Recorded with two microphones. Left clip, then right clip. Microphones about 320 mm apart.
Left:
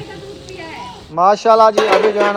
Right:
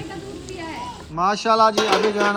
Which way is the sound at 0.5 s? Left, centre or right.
Right.